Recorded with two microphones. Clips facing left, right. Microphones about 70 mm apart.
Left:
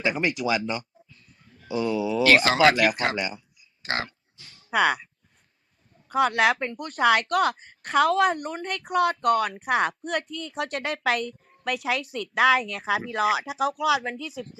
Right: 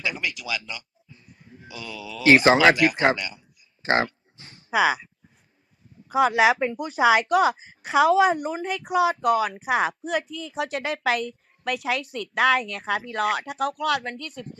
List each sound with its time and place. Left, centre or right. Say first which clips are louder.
0.2 s speech: left 6 dB; left
1.0 s a sound: right 5 dB; right
1.7 s speech: left 12 dB; left
2.2 s speech: right 3 dB; right
3.8 s a sound: right 7 dB; right
4.6 s speech: right 1 dB; centre